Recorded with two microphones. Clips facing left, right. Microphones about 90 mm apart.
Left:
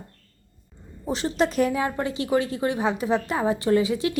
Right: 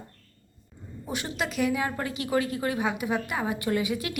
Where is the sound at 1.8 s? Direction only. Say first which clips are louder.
Left 4 dB; 25° left (ahead or behind).